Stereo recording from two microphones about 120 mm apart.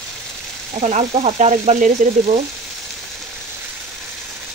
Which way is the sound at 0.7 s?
75° right (ahead or behind).